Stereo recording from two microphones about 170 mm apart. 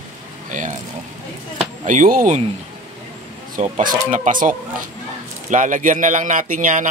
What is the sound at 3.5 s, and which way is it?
Speech, 50° right (ahead or behind).